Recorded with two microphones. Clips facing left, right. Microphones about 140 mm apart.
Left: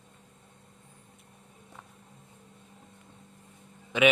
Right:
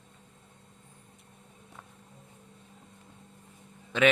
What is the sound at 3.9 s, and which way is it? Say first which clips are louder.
Speech: left 1 dB; 15° left (ahead or behind).